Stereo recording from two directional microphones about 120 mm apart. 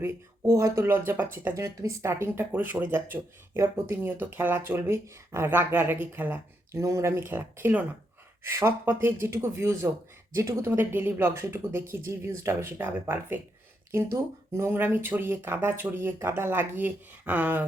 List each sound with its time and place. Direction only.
0.0 s speech: 20° right (ahead or behind)
1.5 s speech: 25° right (ahead or behind)